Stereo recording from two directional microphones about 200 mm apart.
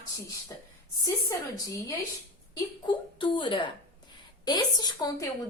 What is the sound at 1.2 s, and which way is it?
Speech, 15° left (ahead or behind).